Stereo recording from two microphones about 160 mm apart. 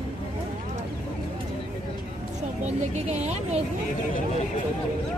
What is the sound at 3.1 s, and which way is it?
Speech, 45° right (ahead or behind).